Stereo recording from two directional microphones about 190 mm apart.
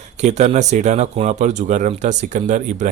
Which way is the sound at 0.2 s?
40° right (ahead or behind).